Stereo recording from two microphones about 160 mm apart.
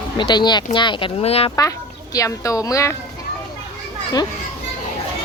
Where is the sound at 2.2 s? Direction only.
20° left (ahead or behind).